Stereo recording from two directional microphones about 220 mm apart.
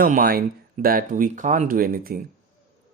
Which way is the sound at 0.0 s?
40° right (ahead or behind).